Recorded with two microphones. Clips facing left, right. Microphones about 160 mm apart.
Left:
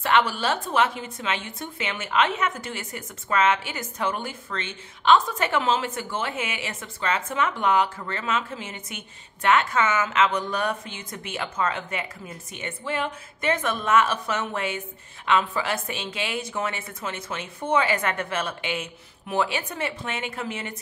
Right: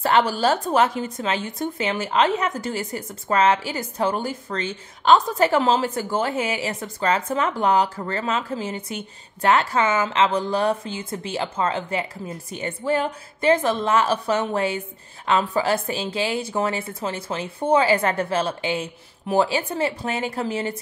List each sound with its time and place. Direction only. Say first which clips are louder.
0.0 s speech: right 3 dB; 35° right (ahead or behind)